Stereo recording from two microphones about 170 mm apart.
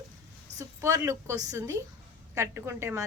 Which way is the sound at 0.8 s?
15° right (ahead or behind).